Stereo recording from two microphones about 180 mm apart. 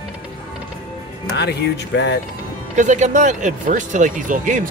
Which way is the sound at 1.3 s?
70° left (ahead or behind).